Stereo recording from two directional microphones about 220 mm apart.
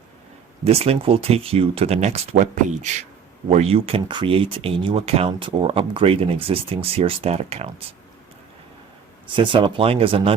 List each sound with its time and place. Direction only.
0.6 s speech: 25° right (ahead or behind)
9.2 s speech: 20° right (ahead or behind)